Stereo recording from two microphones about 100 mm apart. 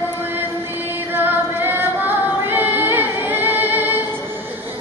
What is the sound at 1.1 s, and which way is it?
Music, 20° right (ahead or behind).